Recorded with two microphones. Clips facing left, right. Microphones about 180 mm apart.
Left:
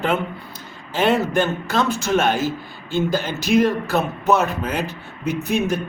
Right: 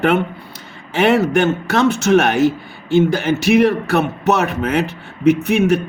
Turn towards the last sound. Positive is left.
turn(degrees=-75)  # may be behind; listen again after turning